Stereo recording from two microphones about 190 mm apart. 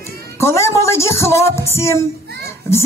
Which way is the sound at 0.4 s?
15° left (ahead or behind).